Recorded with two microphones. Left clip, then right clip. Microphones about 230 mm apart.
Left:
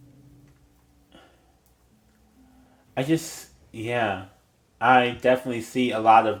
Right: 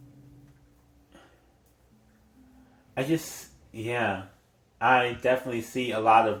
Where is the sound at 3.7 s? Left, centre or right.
Left.